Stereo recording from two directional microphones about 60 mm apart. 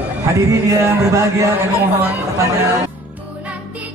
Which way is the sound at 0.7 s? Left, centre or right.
Right.